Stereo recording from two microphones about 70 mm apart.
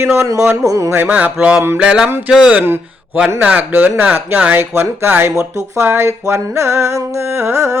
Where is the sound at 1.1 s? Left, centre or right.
Right.